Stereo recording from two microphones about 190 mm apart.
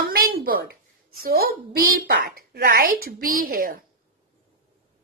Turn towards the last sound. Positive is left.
turn(degrees=-50)  # may be behind; listen again after turning